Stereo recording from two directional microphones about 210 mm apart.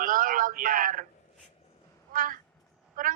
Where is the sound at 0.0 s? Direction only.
40° right (ahead or behind).